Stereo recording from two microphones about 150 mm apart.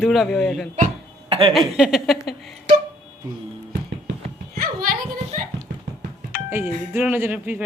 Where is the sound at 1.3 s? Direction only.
35° right (ahead or behind).